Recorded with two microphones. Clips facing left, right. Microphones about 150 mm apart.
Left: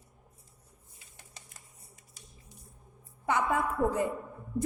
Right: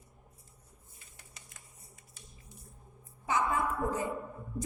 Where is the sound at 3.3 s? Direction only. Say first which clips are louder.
Left 2 dB; 60° left (ahead or behind).